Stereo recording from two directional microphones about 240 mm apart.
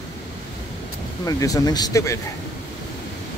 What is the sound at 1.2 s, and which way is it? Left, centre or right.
Speech, centre.